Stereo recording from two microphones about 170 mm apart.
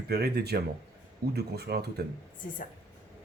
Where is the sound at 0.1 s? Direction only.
70° right (ahead or behind).